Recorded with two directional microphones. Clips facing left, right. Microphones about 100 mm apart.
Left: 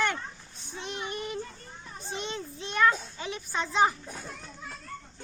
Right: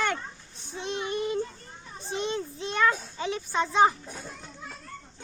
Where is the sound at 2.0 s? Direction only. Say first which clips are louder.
Right 5 dB; 25° right (ahead or behind).